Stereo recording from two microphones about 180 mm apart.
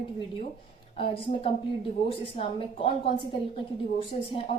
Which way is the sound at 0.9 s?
30° left (ahead or behind).